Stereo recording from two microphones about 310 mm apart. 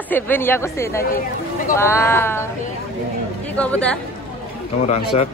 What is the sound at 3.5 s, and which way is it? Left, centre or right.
Speech, centre.